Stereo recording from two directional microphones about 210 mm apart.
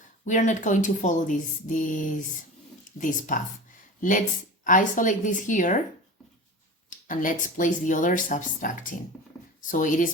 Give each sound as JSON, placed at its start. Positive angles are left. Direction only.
{"t": 0.3, "sound": "speech", "side_deg": 35}
{"t": 7.1, "sound": "speech", "side_deg": 40}